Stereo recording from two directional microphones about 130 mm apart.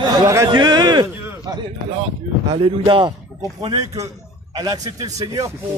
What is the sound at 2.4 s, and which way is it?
Speech, 40° right (ahead or behind).